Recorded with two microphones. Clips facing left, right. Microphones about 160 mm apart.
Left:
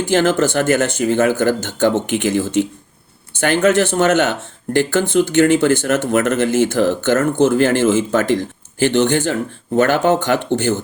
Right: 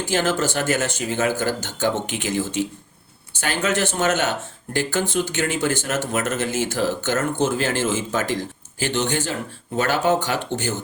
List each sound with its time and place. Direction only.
0.1 s speech: 55° left (ahead or behind)